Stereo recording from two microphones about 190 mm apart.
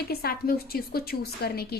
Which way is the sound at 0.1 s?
55° left (ahead or behind).